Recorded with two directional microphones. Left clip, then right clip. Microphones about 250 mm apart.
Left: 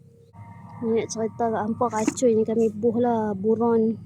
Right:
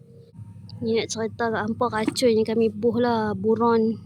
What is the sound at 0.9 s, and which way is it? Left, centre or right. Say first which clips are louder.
A woman's voice: even; centre.